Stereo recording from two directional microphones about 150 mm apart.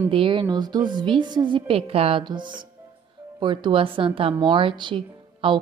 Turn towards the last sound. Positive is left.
turn(degrees=-35)  # may be behind; listen again after turning